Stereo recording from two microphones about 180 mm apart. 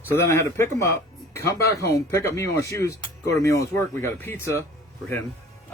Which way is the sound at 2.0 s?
15° left (ahead or behind).